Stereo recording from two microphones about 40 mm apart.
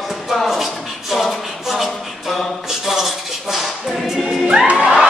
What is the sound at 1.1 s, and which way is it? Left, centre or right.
Music, centre.